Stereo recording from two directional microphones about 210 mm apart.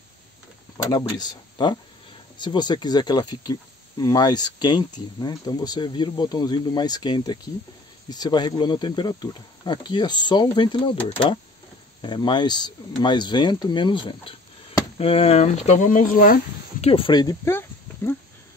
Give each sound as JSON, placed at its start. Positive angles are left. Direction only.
{"t": 0.9, "sound": "speech", "side_deg": 15}
{"t": 16.8, "sound": "speech", "side_deg": 25}